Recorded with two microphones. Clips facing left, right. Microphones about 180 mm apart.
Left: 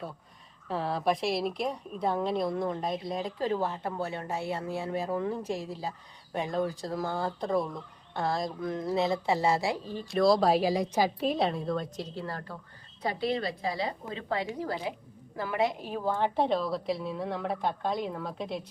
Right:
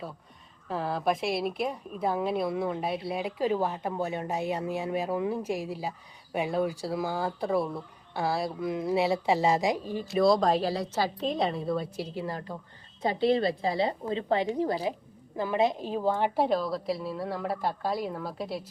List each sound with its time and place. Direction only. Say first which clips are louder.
0.7 s a woman's voice: even; centre (ahead or behind)
10.1 s a woman's voice: even; centre (ahead or behind)
13.0 s a woman's voice: right 5 dB; 25° right (ahead or behind); by 18.6 s 5° right (ahead or behind)